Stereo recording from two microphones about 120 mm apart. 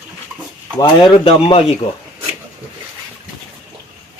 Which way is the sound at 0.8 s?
45° left (ahead or behind).